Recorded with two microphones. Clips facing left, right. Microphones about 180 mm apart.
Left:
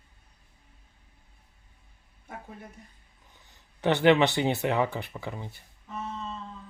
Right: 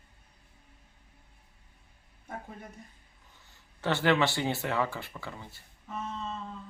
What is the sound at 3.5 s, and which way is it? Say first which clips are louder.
Speech: left 5 dB; 20° left (ahead or behind).